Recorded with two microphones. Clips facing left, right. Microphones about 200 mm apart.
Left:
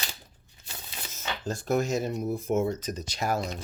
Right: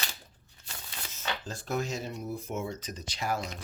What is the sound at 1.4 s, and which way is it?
Speech, 45° left (ahead or behind).